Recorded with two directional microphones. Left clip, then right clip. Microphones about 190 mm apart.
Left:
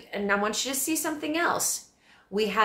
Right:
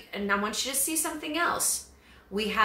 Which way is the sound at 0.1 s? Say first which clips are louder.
Left 2 dB; 35° left (ahead or behind).